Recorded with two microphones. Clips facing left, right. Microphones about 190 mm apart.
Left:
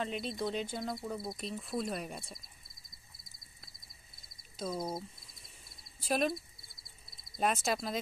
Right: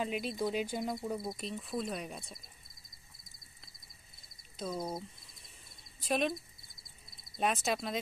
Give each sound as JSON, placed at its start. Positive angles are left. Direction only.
{"t": 0.0, "sound": "speech", "side_deg": -10}
{"t": 1.3, "sound": "speech", "side_deg": 0}
{"t": 4.6, "sound": "a sound", "side_deg": 5}
{"t": 5.9, "sound": "speech", "side_deg": 0}